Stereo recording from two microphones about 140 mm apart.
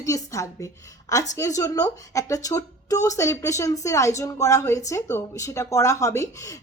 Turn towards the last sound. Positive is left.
turn(degrees=20)  # may be behind; listen again after turning